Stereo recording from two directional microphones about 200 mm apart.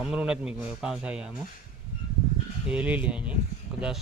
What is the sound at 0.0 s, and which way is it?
Speech, 5° right (ahead or behind).